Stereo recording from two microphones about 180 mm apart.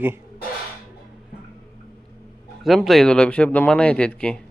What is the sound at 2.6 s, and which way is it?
Speech, centre (ahead or behind).